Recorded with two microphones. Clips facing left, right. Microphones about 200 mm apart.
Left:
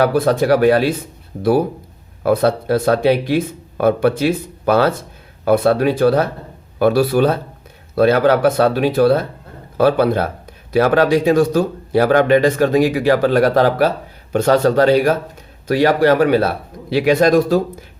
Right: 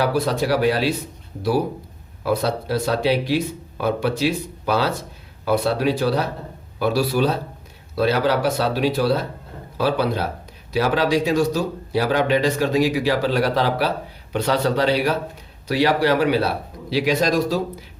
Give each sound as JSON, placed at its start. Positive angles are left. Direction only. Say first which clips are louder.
{"t": 0.0, "sound": "speech", "louder": "left 6 dB", "side_deg": 55}